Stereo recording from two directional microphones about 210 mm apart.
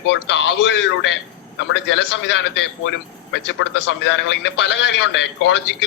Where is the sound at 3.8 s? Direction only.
60° left (ahead or behind).